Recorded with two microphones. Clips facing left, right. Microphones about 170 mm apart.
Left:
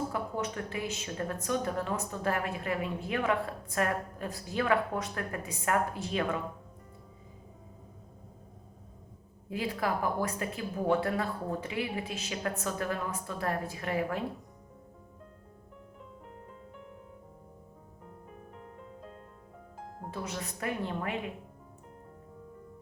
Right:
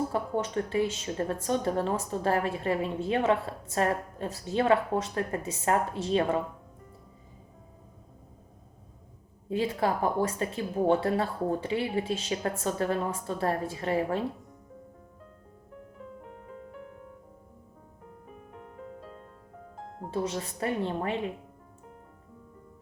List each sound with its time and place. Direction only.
0.1 s a woman's voice: 30° right (ahead or behind)
9.5 s a woman's voice: 30° right (ahead or behind)
19.7 s music: centre (ahead or behind)
20.1 s a woman's voice: 30° right (ahead or behind)